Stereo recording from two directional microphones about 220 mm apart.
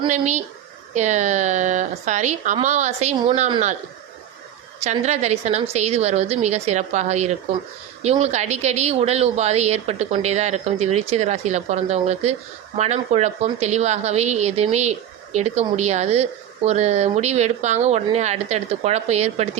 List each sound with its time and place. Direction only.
0.0 s speech: 30° right (ahead or behind)
4.8 s speech: 30° right (ahead or behind)